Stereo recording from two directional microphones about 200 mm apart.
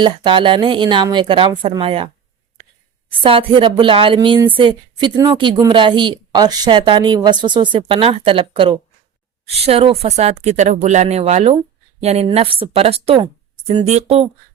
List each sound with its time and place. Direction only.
0.0 s a woman's voice: 25° right (ahead or behind)
3.2 s a woman's voice: 25° right (ahead or behind)